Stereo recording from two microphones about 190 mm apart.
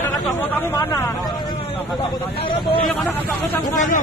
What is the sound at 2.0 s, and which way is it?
Speech, 30° left (ahead or behind).